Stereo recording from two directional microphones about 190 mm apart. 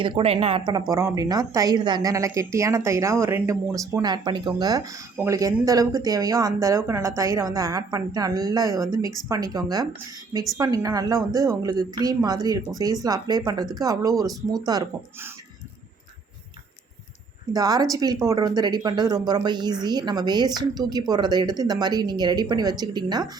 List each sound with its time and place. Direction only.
0.0 s a woman's voice: 30° right (ahead or behind)
17.5 s a woman's voice: 20° right (ahead or behind)